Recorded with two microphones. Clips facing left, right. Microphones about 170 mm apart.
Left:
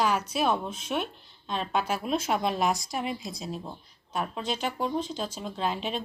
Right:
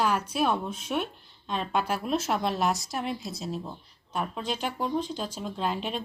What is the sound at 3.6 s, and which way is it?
Speech, 10° left (ahead or behind).